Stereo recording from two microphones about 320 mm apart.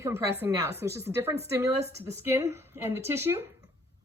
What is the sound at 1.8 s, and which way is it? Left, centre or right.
Speech, centre.